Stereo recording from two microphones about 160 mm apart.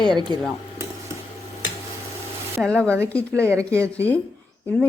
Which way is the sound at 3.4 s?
15° right (ahead or behind).